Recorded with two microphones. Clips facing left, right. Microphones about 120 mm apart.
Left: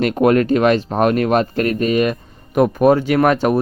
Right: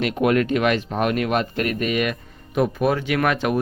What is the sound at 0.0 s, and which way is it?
Speech, 40° left (ahead or behind).